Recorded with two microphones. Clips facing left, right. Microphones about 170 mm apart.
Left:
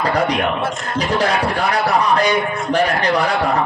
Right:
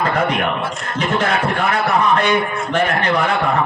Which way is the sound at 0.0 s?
35° left (ahead or behind).